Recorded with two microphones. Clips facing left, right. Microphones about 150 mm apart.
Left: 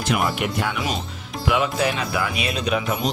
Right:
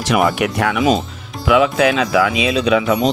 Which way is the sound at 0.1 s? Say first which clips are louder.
Right 7 dB; 90° right.